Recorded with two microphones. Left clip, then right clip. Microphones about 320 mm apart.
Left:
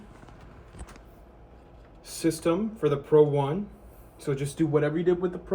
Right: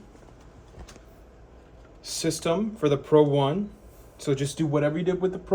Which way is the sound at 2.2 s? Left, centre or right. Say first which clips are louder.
Even; right.